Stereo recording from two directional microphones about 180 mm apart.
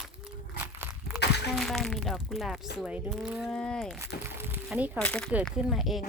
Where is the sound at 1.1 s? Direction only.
70° left (ahead or behind).